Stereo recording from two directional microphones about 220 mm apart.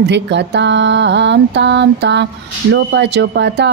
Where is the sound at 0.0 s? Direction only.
50° right (ahead or behind).